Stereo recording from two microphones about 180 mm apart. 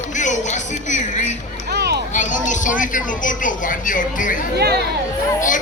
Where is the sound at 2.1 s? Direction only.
45° left (ahead or behind).